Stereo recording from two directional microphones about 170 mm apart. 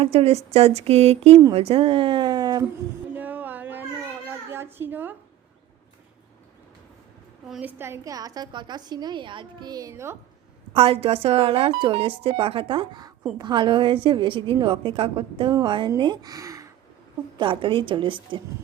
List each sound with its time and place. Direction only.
0.0 s speech: 35° right (ahead or behind)
3.2 s a sound: 10° right (ahead or behind)
7.5 s a woman's voice: 10° right (ahead or behind)
10.8 s a woman's voice: 35° right (ahead or behind)